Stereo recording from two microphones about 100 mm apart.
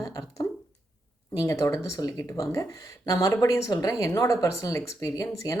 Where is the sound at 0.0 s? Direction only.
35° left (ahead or behind).